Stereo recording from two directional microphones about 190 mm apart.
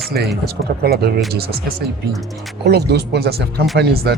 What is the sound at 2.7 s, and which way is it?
Speech, 60° right (ahead or behind).